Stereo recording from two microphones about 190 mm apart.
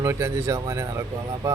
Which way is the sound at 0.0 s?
15° right (ahead or behind).